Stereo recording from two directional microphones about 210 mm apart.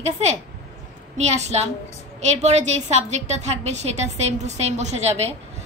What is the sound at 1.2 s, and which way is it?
A woman's voice, 35° right (ahead or behind).